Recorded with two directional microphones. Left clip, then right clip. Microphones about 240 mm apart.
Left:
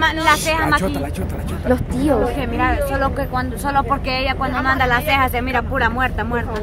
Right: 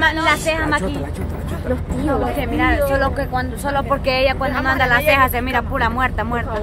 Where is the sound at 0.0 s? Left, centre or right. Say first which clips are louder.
Even; centre.